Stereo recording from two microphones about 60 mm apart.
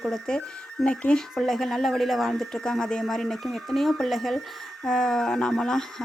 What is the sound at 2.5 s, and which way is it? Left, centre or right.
Speech, centre.